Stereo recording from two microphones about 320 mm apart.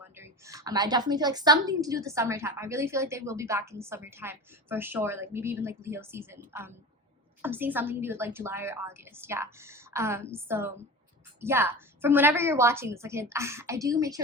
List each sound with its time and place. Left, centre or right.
0.2 s a woman's voice: centre